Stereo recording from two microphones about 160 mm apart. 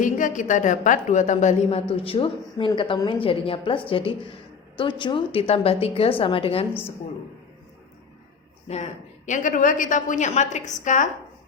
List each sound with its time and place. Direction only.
0.0 s a woman's voice: 55° left (ahead or behind); by 6.7 s 35° left (ahead or behind)
8.6 s a woman's voice: 45° left (ahead or behind)